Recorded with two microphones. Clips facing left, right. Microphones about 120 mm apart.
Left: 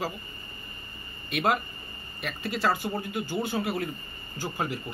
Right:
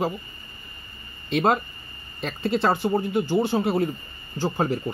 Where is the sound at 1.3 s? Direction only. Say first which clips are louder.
Right 5 dB; 35° right (ahead or behind).